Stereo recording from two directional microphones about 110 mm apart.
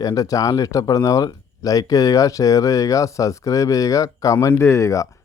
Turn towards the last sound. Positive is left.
turn(degrees=30)  # may be behind; listen again after turning